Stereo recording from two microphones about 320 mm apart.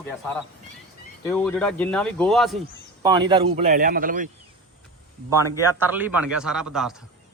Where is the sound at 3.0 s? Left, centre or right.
Centre.